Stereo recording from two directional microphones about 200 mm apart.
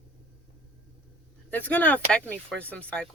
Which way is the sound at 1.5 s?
10° left (ahead or behind).